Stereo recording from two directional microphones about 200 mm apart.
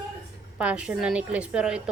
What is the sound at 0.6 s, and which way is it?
Speech, 5° right (ahead or behind).